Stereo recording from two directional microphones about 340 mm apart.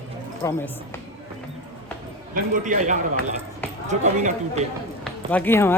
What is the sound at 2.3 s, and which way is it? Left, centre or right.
Speech, right.